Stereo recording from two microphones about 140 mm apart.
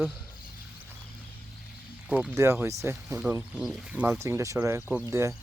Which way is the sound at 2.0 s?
10° right (ahead or behind).